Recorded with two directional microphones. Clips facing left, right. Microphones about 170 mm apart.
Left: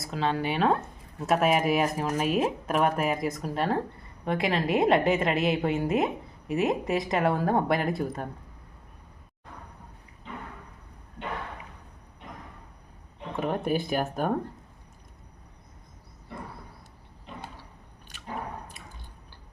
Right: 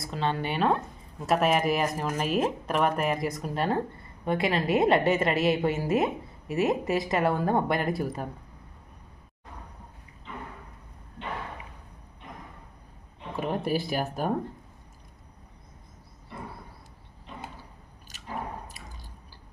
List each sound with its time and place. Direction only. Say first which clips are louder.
0.0 s speech: left 1 dB; centre (ahead or behind)
13.3 s speech: left 1 dB; centre (ahead or behind)